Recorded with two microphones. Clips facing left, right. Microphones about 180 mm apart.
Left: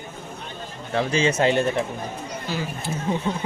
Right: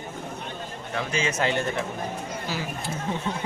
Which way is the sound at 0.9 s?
30° left (ahead or behind).